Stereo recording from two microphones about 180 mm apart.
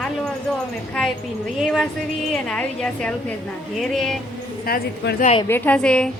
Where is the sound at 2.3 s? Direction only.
5° left (ahead or behind).